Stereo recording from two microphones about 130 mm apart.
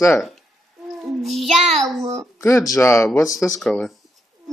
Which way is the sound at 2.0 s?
25° right (ahead or behind).